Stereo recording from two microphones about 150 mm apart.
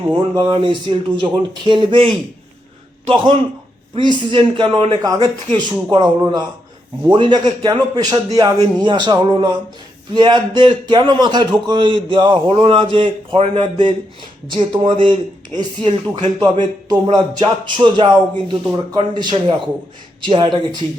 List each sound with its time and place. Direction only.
0.1 s a man's voice: 30° right (ahead or behind)
3.9 s a man's voice: 30° right (ahead or behind)